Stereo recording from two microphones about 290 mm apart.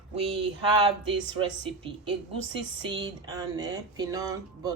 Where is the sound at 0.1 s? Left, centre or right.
Centre.